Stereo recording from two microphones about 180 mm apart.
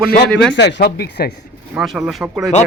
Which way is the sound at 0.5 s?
75° left (ahead or behind).